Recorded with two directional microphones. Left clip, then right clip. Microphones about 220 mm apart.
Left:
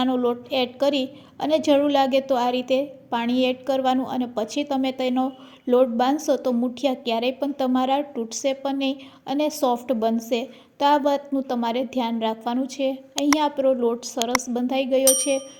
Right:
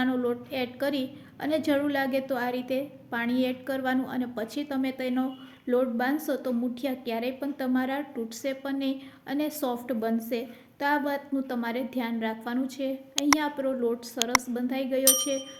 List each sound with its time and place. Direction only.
0.0 s a woman's voice: 20° left (ahead or behind)